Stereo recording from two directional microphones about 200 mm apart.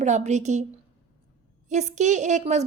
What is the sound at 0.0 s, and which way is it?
Speech, 35° right (ahead or behind).